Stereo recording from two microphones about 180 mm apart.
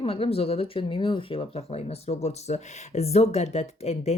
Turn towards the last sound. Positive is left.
turn(degrees=35)  # may be behind; listen again after turning